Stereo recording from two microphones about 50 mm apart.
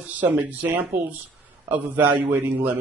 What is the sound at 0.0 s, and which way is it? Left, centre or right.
Speech, right.